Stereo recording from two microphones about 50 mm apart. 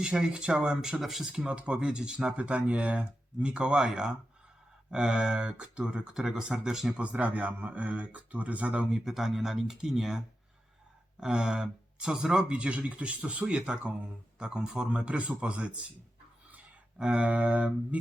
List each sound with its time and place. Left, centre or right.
0.0 s speech: centre
1.3 s speech: centre
7.0 s speech: right
8.9 s speech: centre; by 15.8 s right
17.0 s speech: right